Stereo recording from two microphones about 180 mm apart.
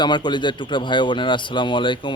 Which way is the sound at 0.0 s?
25° left (ahead or behind).